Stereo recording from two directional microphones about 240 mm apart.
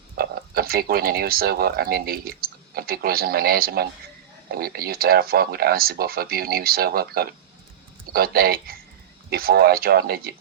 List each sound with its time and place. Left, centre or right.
0.2 s speech: right